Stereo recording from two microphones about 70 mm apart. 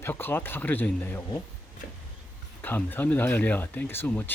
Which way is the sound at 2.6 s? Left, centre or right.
Left.